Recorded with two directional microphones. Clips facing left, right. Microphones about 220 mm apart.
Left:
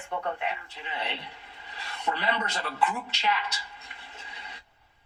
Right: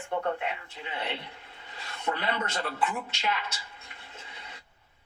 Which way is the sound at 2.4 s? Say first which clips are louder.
Right 1 dB; 50° right (ahead or behind).